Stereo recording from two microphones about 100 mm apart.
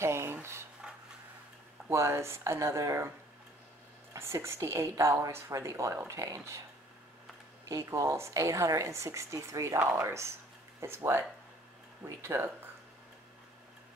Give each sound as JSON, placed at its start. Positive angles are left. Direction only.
{"t": 0.0, "sound": "a sound", "side_deg": -25}
{"t": 1.9, "sound": "speech", "side_deg": -25}
{"t": 4.1, "sound": "speech", "side_deg": -30}
{"t": 7.6, "sound": "a woman's voice", "side_deg": -30}